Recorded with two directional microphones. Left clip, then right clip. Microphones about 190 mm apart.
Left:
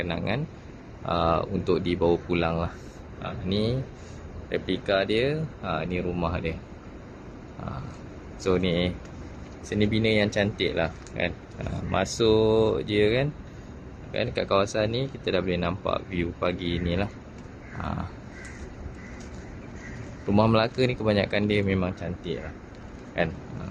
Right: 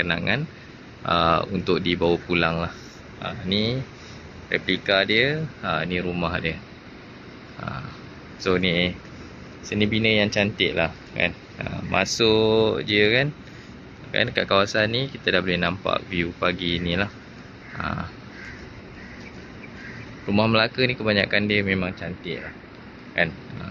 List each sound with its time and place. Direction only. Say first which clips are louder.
0.0 s speech: right 6 dB; 5° left (ahead or behind)
8.4 s speech: right 3 dB; 10° left (ahead or behind)
17.7 s a sound: right 5 dB; 10° left (ahead or behind)
20.3 s speech: right 2 dB; 15° left (ahead or behind)